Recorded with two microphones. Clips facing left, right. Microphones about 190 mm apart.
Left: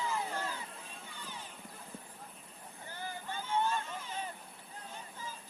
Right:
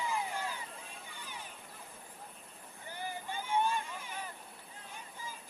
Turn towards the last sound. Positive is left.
turn(degrees=-15)  # may be behind; listen again after turning